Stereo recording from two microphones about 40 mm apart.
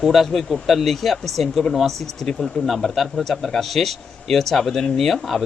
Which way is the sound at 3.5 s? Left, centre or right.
Centre.